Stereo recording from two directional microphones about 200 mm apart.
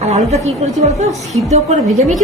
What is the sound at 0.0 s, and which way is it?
A woman's voice, 35° right (ahead or behind).